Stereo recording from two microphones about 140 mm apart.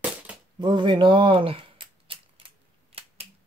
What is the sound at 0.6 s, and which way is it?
Scissors, 35° right (ahead or behind).